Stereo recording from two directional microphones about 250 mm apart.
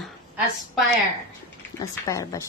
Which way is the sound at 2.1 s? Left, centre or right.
Centre.